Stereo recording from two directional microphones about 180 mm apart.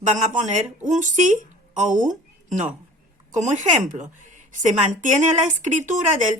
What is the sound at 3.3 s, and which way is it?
A woman's voice, 40° right (ahead or behind).